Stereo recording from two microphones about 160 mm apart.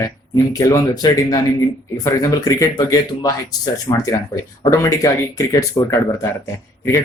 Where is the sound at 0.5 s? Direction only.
20° left (ahead or behind).